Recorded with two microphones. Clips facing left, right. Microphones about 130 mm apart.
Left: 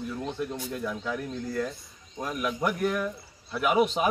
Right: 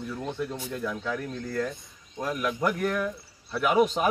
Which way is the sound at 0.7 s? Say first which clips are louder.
Right 2 dB; 5° left (ahead or behind).